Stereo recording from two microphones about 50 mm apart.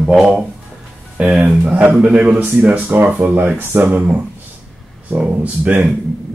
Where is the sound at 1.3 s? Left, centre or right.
Right.